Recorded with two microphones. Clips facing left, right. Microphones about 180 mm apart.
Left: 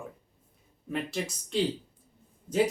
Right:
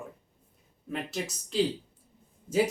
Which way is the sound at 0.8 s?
Centre (ahead or behind).